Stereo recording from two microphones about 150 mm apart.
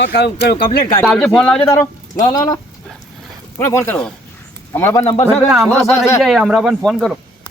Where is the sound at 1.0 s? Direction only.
5° left (ahead or behind).